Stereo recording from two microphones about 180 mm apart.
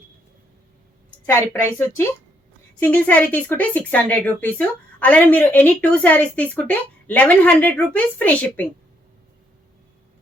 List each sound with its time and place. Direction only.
1.3 s a woman's voice: 15° left (ahead or behind)